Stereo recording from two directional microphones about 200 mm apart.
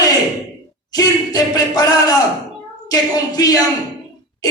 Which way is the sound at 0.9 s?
20° left (ahead or behind).